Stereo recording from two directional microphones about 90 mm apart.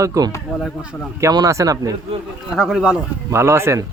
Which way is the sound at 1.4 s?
40° right (ahead or behind).